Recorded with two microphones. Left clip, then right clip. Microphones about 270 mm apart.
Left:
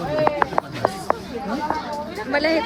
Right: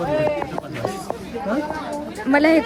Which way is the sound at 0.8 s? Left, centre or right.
Right.